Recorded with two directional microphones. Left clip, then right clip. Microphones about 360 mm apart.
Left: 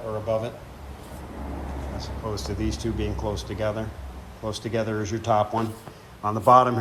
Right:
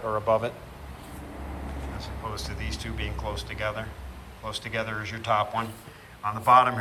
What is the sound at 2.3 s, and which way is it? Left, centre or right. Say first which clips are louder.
Speech: left 5 dB; centre.